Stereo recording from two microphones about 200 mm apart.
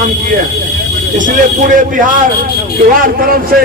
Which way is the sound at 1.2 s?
40° right (ahead or behind).